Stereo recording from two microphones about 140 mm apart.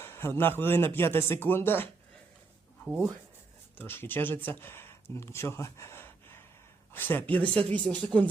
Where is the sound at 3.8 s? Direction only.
15° left (ahead or behind).